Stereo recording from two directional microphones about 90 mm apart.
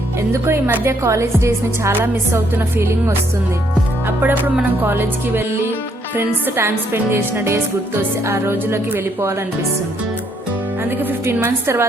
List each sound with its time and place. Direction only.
0.4 s speech: 25° right (ahead or behind)
11.0 s speech: 25° right (ahead or behind)